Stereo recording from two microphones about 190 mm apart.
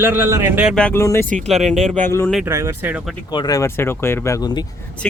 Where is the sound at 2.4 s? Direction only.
15° right (ahead or behind).